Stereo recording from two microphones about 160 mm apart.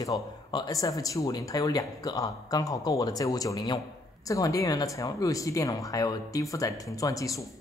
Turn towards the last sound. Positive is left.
turn(degrees=20)  # may be behind; listen again after turning